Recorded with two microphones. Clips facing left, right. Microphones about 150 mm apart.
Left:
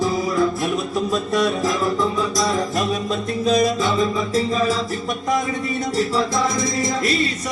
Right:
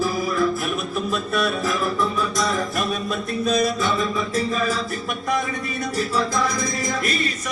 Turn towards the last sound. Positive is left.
turn(degrees=20)  # may be behind; listen again after turning